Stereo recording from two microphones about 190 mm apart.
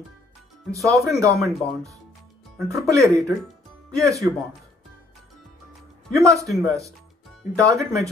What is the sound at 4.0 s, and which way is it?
Speech, 15° right (ahead or behind).